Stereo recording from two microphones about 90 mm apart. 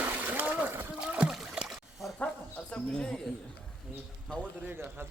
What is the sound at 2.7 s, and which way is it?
Speech, 10° left (ahead or behind).